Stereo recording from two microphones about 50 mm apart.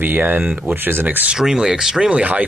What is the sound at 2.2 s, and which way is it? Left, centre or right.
Speech, right.